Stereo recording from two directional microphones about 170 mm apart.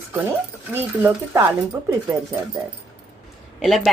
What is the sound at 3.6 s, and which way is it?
Speech, centre (ahead or behind).